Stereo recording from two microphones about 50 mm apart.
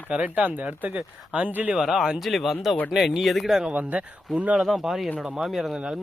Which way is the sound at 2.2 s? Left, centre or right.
Centre.